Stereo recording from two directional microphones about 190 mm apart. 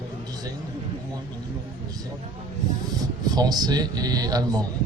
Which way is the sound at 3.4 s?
20° right (ahead or behind).